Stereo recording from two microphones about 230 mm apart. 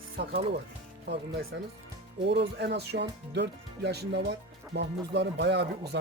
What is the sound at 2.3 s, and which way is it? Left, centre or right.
Speech, right.